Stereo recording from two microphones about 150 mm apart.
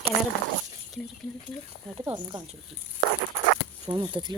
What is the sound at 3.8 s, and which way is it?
Speech, 30° right (ahead or behind).